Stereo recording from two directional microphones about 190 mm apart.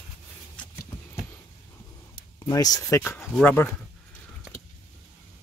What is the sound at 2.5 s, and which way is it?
Speech, 20° left (ahead or behind).